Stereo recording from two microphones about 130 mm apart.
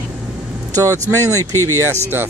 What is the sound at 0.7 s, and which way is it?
Speech, 25° right (ahead or behind).